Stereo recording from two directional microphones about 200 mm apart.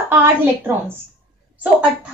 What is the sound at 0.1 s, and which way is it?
A child's voice, 10° right (ahead or behind).